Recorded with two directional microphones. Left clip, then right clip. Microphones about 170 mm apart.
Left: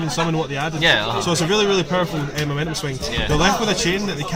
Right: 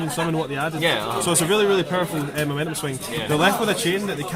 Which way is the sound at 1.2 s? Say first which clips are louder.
Left 1 dB; 35° right (ahead or behind).